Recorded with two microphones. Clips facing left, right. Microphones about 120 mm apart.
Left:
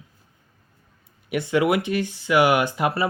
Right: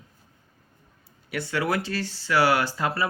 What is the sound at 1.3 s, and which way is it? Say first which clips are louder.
Speech: left 6 dB; 20° left (ahead or behind).